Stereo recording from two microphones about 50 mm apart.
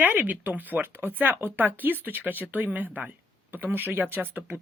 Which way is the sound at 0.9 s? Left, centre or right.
Right.